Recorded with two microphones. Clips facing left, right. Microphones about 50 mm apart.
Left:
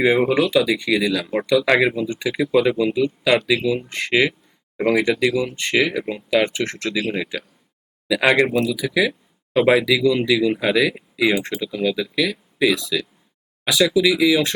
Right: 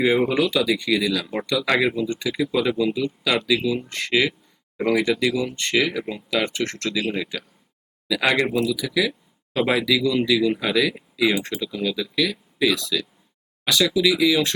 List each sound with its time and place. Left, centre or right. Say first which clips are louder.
0.0 s speech: left 2 dB; centre
2.4 s speech: left 4 dB; centre
5.3 s speech: left 2 dB; centre